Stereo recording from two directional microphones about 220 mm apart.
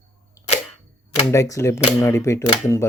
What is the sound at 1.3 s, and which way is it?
Speech, 15° left (ahead or behind).